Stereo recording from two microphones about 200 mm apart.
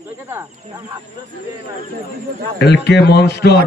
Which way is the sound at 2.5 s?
55° left (ahead or behind).